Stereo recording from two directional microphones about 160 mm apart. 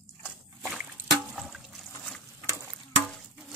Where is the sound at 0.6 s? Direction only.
5° right (ahead or behind).